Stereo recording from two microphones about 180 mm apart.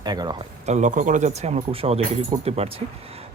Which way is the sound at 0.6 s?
40° right (ahead or behind).